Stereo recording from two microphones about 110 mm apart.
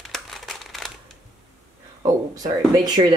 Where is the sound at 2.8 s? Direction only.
40° right (ahead or behind).